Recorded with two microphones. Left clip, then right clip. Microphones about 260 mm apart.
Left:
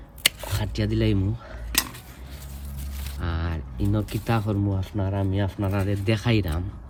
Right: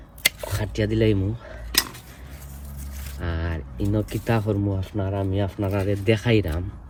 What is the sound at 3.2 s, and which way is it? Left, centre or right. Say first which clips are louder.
Speech: right 2 dB; centre.